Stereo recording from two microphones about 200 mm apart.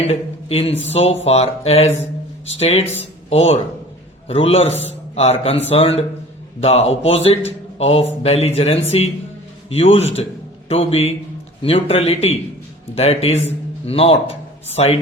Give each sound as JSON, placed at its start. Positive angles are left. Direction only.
{"t": 0.1, "sound": "a man's voice", "side_deg": 30}